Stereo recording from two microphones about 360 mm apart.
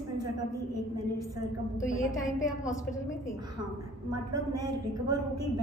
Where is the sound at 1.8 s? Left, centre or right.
Centre.